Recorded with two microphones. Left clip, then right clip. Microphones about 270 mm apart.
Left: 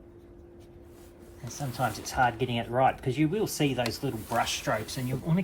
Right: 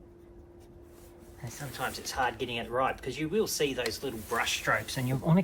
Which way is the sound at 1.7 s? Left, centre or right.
Left.